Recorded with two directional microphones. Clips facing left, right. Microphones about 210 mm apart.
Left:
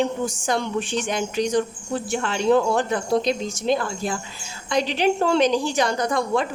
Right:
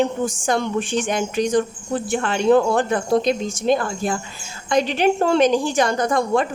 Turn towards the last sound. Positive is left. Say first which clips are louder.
# right 3 dB
turn(degrees=-50)  # may be behind; listen again after turning